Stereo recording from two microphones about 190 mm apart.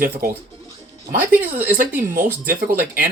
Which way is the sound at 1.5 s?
10° right (ahead or behind).